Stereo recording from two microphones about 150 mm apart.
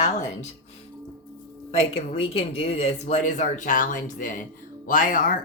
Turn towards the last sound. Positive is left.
turn(degrees=65)  # may be behind; listen again after turning